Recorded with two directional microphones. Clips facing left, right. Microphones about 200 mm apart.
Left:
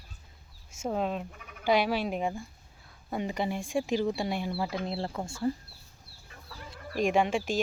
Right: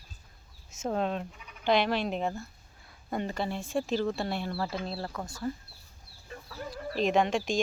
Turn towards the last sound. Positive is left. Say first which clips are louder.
# even
turn(degrees=5)  # may be behind; listen again after turning